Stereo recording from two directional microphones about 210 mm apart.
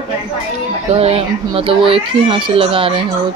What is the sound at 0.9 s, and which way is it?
Speech, 30° right (ahead or behind).